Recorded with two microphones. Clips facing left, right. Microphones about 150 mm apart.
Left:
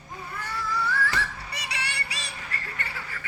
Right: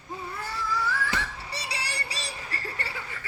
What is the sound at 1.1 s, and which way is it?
Music, 30° right (ahead or behind).